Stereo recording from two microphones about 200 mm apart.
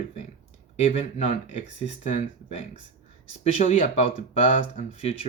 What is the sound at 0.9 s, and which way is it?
Speech, 35° left (ahead or behind).